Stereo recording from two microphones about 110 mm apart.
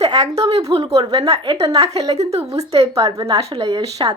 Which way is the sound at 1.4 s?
40° right (ahead or behind).